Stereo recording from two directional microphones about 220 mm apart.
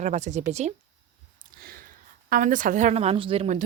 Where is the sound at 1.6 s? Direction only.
40° right (ahead or behind).